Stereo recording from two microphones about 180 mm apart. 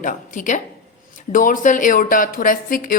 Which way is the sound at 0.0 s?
45° left (ahead or behind).